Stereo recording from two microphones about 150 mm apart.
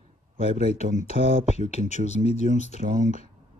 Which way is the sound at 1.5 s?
45° left (ahead or behind).